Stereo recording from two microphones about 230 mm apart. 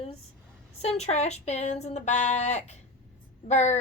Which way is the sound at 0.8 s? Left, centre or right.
Left.